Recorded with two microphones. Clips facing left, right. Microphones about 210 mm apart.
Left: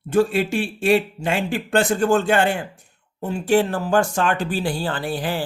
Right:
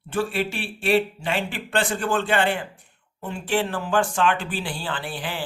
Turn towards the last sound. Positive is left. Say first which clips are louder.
# left 6 dB
turn(degrees=40)  # may be behind; listen again after turning